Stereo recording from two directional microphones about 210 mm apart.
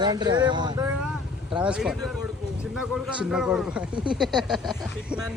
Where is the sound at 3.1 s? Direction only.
5° right (ahead or behind).